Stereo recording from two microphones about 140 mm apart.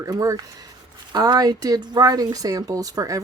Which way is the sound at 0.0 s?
25° right (ahead or behind).